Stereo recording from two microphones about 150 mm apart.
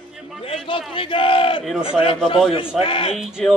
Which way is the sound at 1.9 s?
35° left (ahead or behind).